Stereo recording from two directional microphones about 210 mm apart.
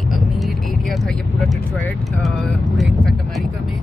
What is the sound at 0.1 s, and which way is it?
Vehicle, centre (ahead or behind).